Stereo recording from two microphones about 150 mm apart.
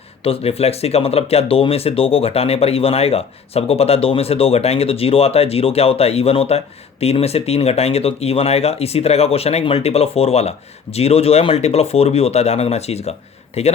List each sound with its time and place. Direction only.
0.3 s speech: 40° left (ahead or behind)